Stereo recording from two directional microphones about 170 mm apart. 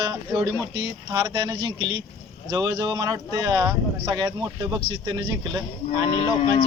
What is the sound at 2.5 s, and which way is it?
Speech, 20° right (ahead or behind).